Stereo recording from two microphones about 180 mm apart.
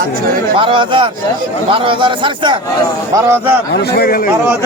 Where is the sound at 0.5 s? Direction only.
25° right (ahead or behind).